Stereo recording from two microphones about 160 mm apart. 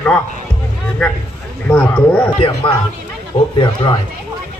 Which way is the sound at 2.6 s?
35° left (ahead or behind).